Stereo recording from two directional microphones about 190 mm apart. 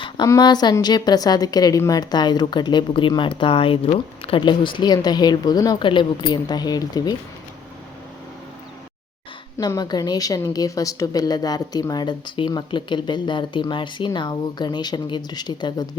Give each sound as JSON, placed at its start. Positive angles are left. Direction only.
{"t": 0.0, "sound": "a woman's voice", "side_deg": 20}
{"t": 9.6, "sound": "a woman's voice", "side_deg": 20}